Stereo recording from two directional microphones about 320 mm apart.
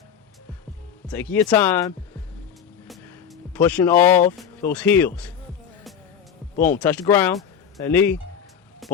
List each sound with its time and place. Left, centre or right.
1.0 s speech: centre
3.5 s speech: centre
6.6 s speech: centre